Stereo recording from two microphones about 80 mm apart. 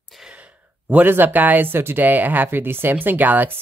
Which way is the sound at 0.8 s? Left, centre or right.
Right.